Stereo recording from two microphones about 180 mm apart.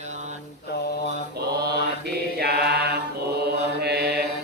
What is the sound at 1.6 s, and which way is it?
Mantra, 60° right (ahead or behind).